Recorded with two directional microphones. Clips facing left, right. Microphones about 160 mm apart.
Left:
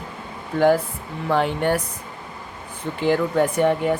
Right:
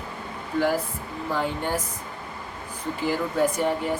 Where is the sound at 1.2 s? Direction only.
70° left (ahead or behind).